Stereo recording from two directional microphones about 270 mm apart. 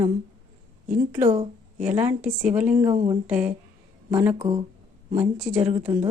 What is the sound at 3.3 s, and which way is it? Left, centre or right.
Speech, centre.